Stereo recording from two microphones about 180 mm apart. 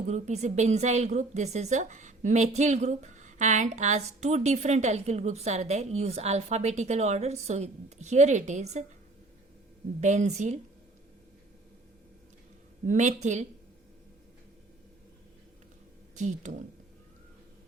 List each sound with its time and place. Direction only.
0.1 s a woman's voice: 40° right (ahead or behind)
10.0 s a woman's voice: 40° right (ahead or behind)
12.9 s a woman's voice: 40° right (ahead or behind)
16.1 s speech: 40° right (ahead or behind)